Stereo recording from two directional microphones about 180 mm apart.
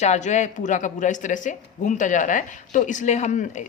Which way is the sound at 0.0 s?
40° left (ahead or behind).